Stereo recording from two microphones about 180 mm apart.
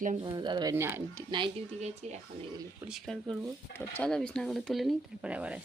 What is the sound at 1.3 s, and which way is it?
Speech, 25° right (ahead or behind).